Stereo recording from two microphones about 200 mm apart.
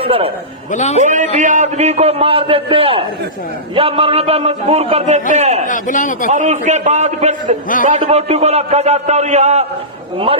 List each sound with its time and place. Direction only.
0.0 s a sound: 30° right (ahead or behind)
0.7 s speech: 35° left (ahead or behind)
0.9 s a man's voice: 35° right (ahead or behind)
5.6 s speech: 40° left (ahead or behind)
6.3 s a man's voice: 35° right (ahead or behind)